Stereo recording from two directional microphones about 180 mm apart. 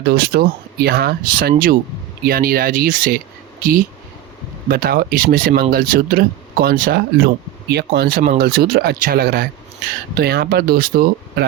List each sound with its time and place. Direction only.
0.0 s speech: 60° right (ahead or behind)